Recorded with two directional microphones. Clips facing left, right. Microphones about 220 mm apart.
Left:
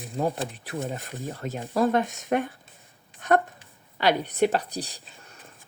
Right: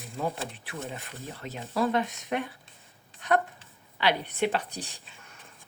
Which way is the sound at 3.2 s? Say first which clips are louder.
Left 4 dB; 45° left (ahead or behind).